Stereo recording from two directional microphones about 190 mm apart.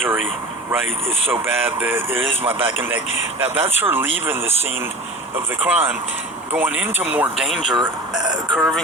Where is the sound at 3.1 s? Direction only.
35° left (ahead or behind).